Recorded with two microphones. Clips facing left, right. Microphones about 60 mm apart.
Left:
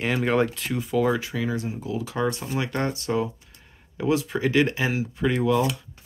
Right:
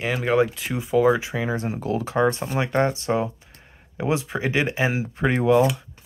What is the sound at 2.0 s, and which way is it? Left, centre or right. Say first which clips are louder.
Speech: right 6 dB; right.